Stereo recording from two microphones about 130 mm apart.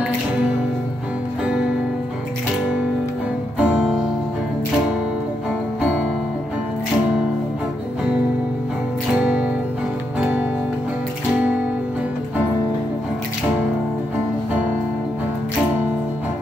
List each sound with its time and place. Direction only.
1.4 s music: 5° right (ahead or behind)
3.5 s music: 10° right (ahead or behind)
9.2 s music: 10° right (ahead or behind)